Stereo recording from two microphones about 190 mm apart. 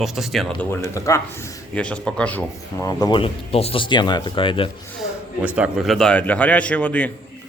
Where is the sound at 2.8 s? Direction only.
20° left (ahead or behind).